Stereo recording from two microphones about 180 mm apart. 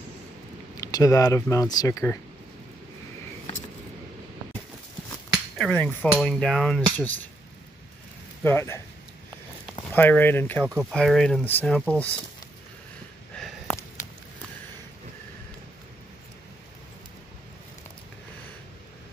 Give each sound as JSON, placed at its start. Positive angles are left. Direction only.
{"t": 0.7, "sound": "speech", "side_deg": 20}
{"t": 5.6, "sound": "speech", "side_deg": 5}
{"t": 8.5, "sound": "speech", "side_deg": 15}
{"t": 9.9, "sound": "speech", "side_deg": 10}
{"t": 10.6, "sound": "speech", "side_deg": 0}
{"t": 13.3, "sound": "a sound", "side_deg": 5}
{"t": 14.0, "sound": "a sound", "side_deg": 45}